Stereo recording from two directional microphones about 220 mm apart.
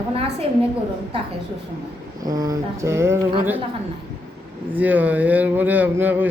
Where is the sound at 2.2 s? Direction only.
15° right (ahead or behind).